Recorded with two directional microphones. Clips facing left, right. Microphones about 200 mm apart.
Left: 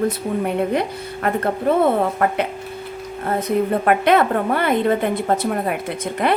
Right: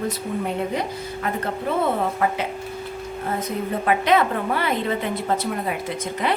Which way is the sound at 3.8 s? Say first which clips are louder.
Even; 55° left (ahead or behind).